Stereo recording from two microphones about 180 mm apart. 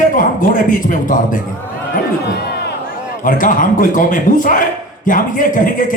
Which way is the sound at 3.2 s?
50° left (ahead or behind).